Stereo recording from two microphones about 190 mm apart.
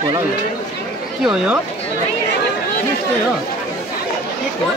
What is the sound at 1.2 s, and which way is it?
Speech, 5° right (ahead or behind).